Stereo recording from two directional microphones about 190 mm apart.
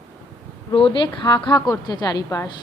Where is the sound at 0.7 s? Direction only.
25° left (ahead or behind).